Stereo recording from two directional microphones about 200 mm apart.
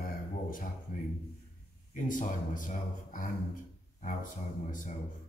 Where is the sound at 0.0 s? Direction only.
45° left (ahead or behind).